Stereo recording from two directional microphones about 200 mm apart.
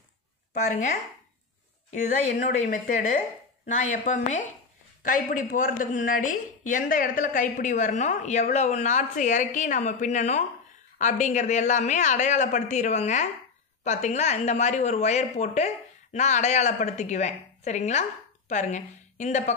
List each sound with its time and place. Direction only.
1.9 s a woman's voice: 35° left (ahead or behind)